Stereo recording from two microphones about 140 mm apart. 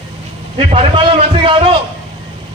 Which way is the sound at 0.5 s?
45° right (ahead or behind).